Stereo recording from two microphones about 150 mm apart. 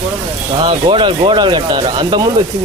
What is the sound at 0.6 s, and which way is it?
Speech, 35° right (ahead or behind).